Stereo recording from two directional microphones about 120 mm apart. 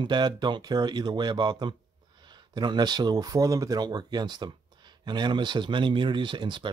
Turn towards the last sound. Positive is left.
turn(degrees=-40)  # may be behind; listen again after turning